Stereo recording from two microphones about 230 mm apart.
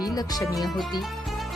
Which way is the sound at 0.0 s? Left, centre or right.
Centre.